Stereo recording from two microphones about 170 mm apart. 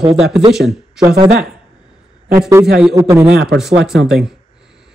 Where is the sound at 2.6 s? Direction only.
5° right (ahead or behind).